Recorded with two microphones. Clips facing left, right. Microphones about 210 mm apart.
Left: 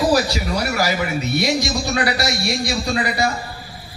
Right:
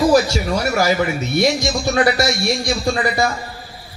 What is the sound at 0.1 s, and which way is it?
Speech, 50° right (ahead or behind).